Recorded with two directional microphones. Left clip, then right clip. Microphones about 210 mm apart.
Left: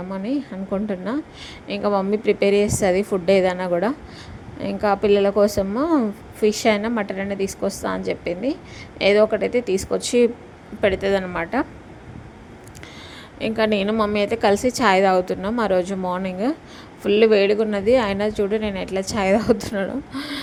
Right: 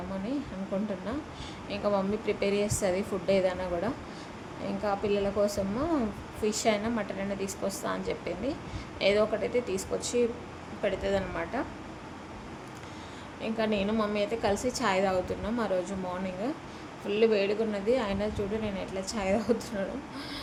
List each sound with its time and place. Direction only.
0.9 s speech: 35° left (ahead or behind)
13.4 s speech: 40° left (ahead or behind)